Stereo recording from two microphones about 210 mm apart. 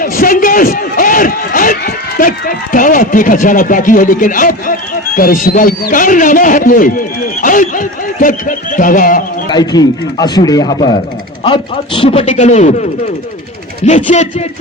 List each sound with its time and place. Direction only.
0.0 s a man's voice: 40° left (ahead or behind)
9.5 s a man's voice: 20° left (ahead or behind)